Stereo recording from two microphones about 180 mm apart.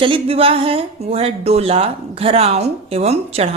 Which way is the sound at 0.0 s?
30° right (ahead or behind).